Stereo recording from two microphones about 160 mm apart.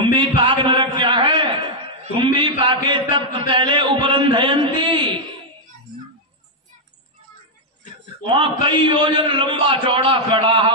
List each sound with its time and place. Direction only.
0.0 s a sound: 30° right (ahead or behind)
2.1 s a man's voice: 30° right (ahead or behind)
8.4 s a man's voice: 30° right (ahead or behind)